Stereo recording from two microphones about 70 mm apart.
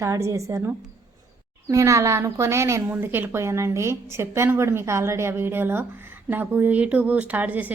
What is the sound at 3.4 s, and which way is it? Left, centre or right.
A woman's voice, right.